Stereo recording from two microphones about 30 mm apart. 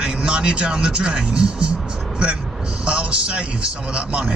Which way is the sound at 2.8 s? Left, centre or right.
Right.